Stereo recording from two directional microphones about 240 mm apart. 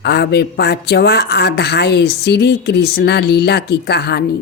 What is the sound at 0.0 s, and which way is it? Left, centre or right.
A woman's voice, left.